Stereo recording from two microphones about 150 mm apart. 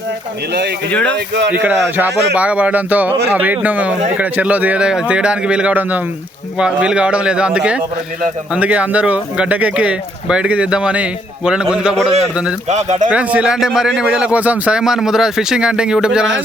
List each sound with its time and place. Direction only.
0.9 s speech: 10° left (ahead or behind)
1.6 s a man's voice: 10° right (ahead or behind)
12.6 s speech: 50° right (ahead or behind)
13.1 s speech: 10° right (ahead or behind)